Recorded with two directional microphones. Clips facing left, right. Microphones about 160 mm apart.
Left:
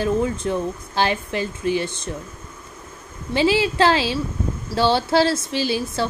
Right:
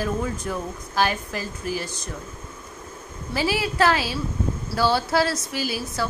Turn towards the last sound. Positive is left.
turn(degrees=25)  # may be behind; listen again after turning